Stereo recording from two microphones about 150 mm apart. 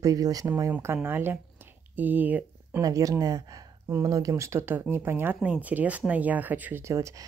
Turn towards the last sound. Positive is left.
turn(degrees=-20)  # may be behind; listen again after turning